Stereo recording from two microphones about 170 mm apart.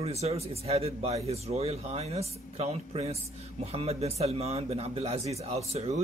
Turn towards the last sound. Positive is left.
turn(degrees=-35)  # may be behind; listen again after turning